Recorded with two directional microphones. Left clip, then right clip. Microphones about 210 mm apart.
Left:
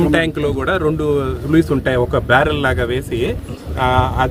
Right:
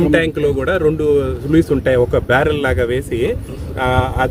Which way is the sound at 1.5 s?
35° left (ahead or behind).